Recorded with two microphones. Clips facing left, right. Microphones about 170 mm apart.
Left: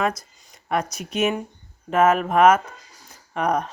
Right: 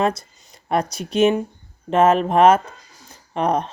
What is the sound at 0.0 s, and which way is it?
Speech, 30° right (ahead or behind).